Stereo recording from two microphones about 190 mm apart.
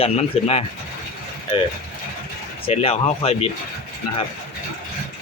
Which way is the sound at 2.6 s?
30° left (ahead or behind).